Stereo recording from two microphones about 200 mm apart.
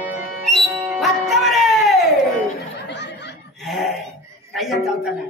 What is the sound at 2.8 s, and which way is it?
Snicker, 60° left (ahead or behind).